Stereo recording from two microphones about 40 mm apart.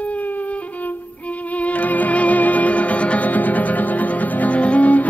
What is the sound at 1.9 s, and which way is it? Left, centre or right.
Music, left.